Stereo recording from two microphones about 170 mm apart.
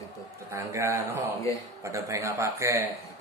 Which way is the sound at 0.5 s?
15° right (ahead or behind).